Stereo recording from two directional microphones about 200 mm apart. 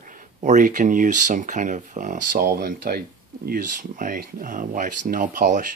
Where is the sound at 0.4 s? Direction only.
40° right (ahead or behind).